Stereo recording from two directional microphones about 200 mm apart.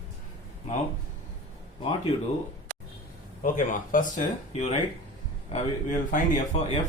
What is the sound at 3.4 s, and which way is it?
Speech, 40° left (ahead or behind).